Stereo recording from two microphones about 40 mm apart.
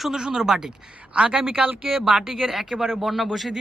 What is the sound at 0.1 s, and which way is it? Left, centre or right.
Speech, centre.